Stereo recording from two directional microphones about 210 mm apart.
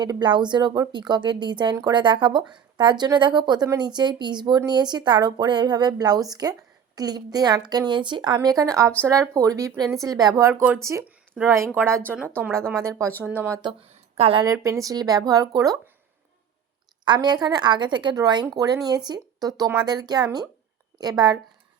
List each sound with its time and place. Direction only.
0.0 s speech: 20° right (ahead or behind)
14.2 s speech: 25° right (ahead or behind)
14.4 s speech: 15° right (ahead or behind)
17.1 s speech: 20° right (ahead or behind)